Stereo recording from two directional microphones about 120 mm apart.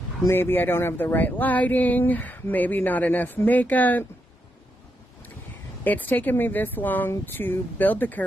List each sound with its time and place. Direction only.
0.2 s speech: 20° left (ahead or behind)
5.9 s speech: 15° left (ahead or behind)